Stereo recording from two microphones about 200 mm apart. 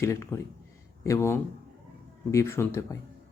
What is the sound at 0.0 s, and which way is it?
A man's voice, 15° left (ahead or behind).